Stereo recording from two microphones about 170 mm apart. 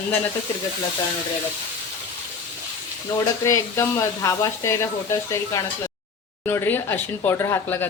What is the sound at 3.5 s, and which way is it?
Speech, 20° left (ahead or behind).